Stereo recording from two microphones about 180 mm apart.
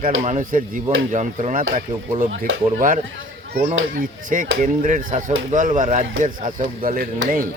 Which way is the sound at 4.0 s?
45° right (ahead or behind).